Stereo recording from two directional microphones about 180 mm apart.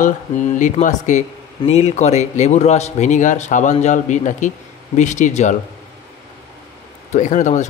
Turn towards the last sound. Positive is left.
turn(degrees=40)  # may be behind; listen again after turning